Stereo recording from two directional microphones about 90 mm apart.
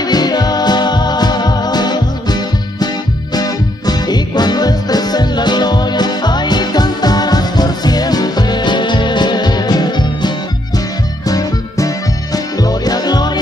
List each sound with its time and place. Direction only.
0.1 s music: 50° left (ahead or behind)
3.3 s music: 45° left (ahead or behind)